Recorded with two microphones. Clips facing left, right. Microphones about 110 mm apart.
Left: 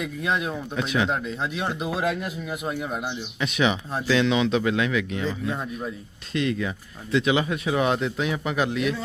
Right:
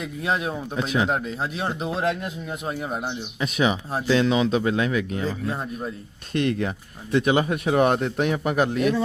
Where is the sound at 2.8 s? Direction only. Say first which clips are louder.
Right 1 dB; 30° right (ahead or behind).